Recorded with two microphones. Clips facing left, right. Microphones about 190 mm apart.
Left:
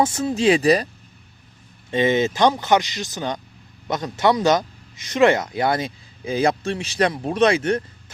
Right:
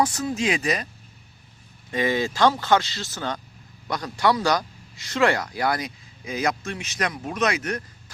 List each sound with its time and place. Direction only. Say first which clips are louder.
0.0 s speech: left 5 dB; 25° left (ahead or behind)
1.9 s speech: left 5 dB; 25° left (ahead or behind)